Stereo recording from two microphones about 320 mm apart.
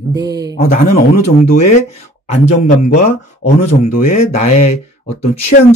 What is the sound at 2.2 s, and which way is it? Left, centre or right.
A man's voice, centre.